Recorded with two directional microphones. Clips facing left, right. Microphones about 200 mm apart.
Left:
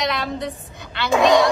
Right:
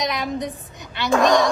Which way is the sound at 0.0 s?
15° right (ahead or behind).